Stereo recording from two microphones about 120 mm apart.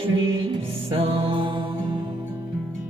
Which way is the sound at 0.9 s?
50° right (ahead or behind).